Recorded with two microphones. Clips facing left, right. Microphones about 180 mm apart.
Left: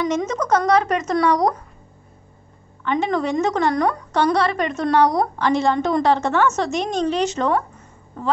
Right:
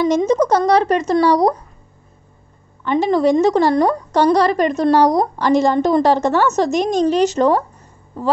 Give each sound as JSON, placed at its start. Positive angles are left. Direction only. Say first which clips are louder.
{"t": 0.0, "sound": "a woman's voice", "louder": "right 7 dB", "side_deg": -30}
{"t": 2.8, "sound": "a woman's voice", "louder": "right 6 dB", "side_deg": -35}